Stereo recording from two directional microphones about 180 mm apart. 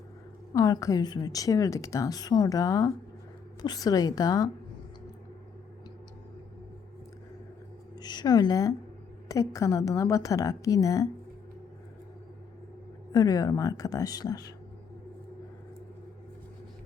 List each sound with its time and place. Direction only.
0.5 s a woman's voice: 20° left (ahead or behind)
7.9 s a woman's voice: 25° left (ahead or behind)
13.1 s a woman's voice: 20° left (ahead or behind)